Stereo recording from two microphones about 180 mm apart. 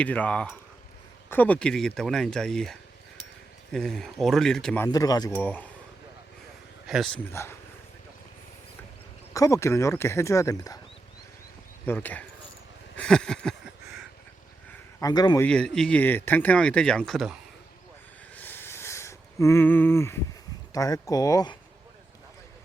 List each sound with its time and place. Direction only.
0.0 s speech: 10° left (ahead or behind)
4.9 s speech: 20° left (ahead or behind)
5.3 s speech: 10° left (ahead or behind)
6.8 s speech: centre (ahead or behind)
7.4 s speech: 15° left (ahead or behind)
9.3 s speech: 20° left (ahead or behind)
11.9 s speech: 10° left (ahead or behind)
13.0 s a sound: 5° left (ahead or behind)
15.0 s speech: 25° left (ahead or behind)
15.4 s speech: 5° left (ahead or behind)
18.3 s a sound: 10° left (ahead or behind)
20.7 s speech: 20° left (ahead or behind)